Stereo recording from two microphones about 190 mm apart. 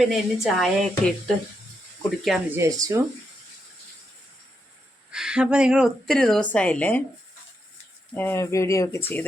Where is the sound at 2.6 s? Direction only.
15° right (ahead or behind).